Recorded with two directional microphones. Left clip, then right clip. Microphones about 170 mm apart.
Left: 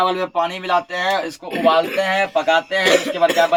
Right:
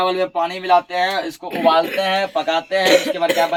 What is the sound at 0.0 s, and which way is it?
Speech, 20° left (ahead or behind).